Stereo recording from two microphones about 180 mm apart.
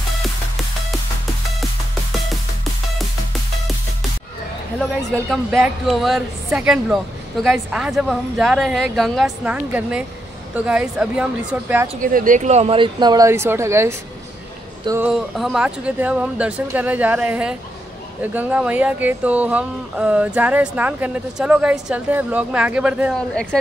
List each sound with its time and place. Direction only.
4.7 s a woman's voice: centre (ahead or behind)
12.0 s speech: 50° right (ahead or behind); by 23.2 s 5° right (ahead or behind)